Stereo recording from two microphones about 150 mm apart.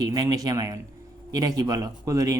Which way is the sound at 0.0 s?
25° right (ahead or behind).